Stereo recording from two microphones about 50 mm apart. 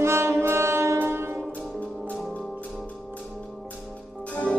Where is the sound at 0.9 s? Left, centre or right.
Right.